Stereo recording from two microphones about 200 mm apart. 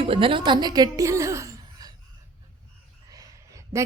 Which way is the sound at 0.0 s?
25° right (ahead or behind).